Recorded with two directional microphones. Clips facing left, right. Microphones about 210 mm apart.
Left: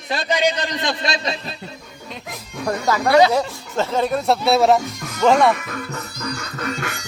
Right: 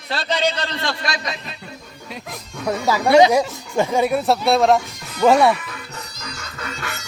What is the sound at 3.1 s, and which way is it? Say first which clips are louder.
Speech: right 2 dB; 15° right (ahead or behind).